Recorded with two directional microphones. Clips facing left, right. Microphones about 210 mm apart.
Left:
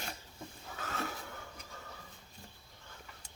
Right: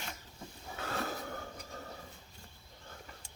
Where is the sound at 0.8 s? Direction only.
35° right (ahead or behind).